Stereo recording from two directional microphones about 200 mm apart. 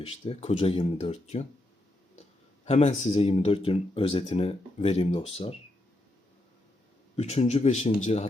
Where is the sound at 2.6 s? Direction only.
35° left (ahead or behind).